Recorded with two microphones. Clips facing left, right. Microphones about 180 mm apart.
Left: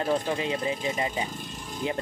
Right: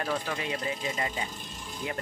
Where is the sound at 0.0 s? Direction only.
25° left (ahead or behind).